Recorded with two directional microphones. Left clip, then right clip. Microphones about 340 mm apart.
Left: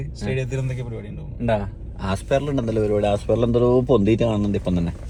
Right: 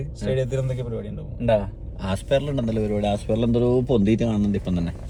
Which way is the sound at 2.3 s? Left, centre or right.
Centre.